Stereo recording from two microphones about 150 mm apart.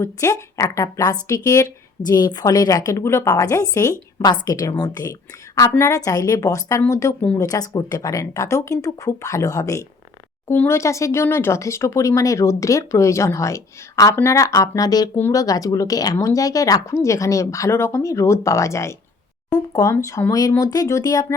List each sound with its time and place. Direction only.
0.0 s speech: 20° left (ahead or behind)